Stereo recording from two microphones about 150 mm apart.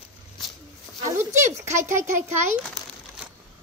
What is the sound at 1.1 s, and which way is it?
Speech, 15° right (ahead or behind).